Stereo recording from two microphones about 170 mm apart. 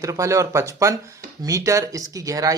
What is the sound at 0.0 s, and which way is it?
Speech, 20° right (ahead or behind).